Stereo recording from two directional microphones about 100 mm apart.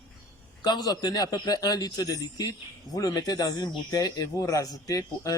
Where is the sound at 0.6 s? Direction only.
45° left (ahead or behind).